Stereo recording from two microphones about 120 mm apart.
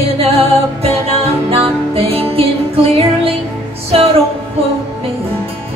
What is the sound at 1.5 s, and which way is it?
Music, 55° right (ahead or behind).